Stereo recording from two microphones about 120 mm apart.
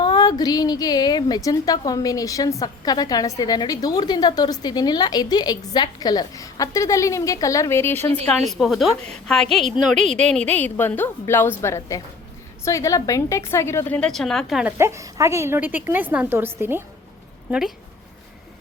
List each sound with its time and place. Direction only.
0.0 s a woman's voice: 35° left (ahead or behind); by 8.3 s 20° left (ahead or behind)
8.3 s a woman's voice: centre (ahead or behind)
14.1 s a woman's voice: 5° left (ahead or behind)
14.8 s a woman's voice: 25° right (ahead or behind)